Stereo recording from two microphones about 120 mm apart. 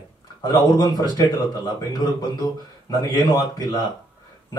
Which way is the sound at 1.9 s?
35° left (ahead or behind).